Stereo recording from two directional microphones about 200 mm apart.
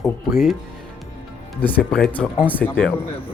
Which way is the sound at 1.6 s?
10° left (ahead or behind).